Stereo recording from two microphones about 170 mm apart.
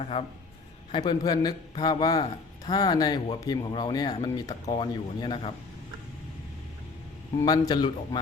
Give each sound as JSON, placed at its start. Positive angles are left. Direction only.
{"t": 0.0, "sound": "a man's voice", "side_deg": 35}
{"t": 0.9, "sound": "speech", "side_deg": 25}
{"t": 7.4, "sound": "speech", "side_deg": 25}